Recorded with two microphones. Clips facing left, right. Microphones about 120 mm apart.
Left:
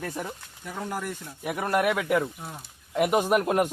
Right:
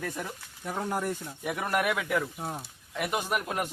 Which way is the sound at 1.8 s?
20° left (ahead or behind).